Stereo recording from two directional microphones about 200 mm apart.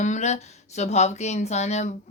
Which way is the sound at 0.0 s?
35° left (ahead or behind).